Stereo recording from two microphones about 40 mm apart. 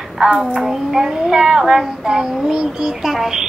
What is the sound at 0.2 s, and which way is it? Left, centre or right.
Child singing, centre.